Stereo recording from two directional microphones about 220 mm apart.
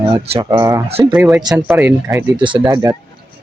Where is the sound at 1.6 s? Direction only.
5° right (ahead or behind).